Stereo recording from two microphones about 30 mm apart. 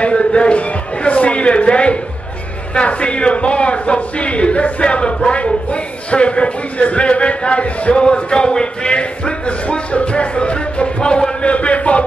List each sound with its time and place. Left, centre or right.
0.0 s speech: left
4.8 s speech: left
7.9 s speech: left
11.4 s speech: left